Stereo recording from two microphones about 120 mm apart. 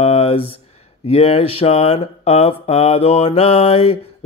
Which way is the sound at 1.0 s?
60° left (ahead or behind).